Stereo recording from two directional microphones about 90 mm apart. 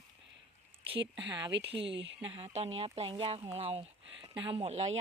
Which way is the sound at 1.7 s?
90° right.